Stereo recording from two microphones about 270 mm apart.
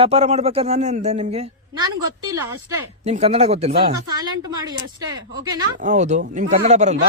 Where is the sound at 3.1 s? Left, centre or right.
Right.